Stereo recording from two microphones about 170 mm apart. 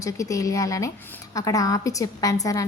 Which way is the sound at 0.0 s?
20° left (ahead or behind).